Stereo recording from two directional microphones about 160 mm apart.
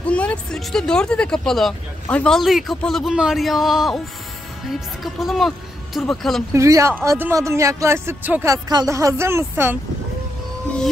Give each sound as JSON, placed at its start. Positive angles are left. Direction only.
{"t": 0.0, "sound": "speech", "side_deg": 10}
{"t": 6.5, "sound": "speech", "side_deg": -20}